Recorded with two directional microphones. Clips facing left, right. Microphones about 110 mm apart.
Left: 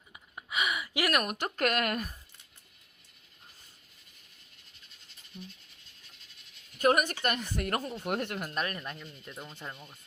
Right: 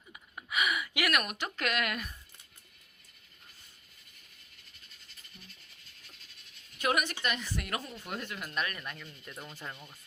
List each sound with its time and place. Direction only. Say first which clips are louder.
0.3 s speech: right 1 dB; 25° left (ahead or behind); by 2.1 s 40° left (ahead or behind)
5.4 s speech: left 11 dB; 20° left (ahead or behind)
6.7 s speech: left 5 dB; 45° left (ahead or behind)
8.0 s speech: left 7 dB; 60° left (ahead or behind)
8.4 s speech: left 2 dB; 35° left (ahead or behind); by 9.8 s 15° left (ahead or behind)